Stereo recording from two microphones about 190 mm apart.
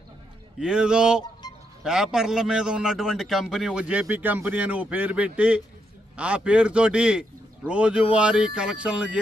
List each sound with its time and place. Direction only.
0.6 s a man's voice: 5° right (ahead or behind)